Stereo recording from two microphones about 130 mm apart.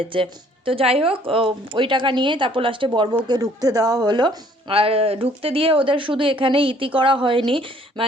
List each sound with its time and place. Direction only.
0.1 s speech: 40° right (ahead or behind)
3.2 s speech: 30° right (ahead or behind)
4.7 s speech: 45° right (ahead or behind)